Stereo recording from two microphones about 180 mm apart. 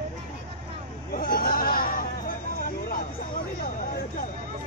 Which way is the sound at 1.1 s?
50° left (ahead or behind).